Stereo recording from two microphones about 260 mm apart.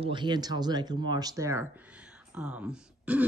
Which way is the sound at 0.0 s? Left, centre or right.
Centre.